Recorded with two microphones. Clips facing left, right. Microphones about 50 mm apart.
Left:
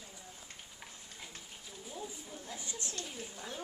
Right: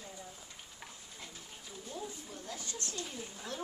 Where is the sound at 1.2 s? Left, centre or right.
Centre.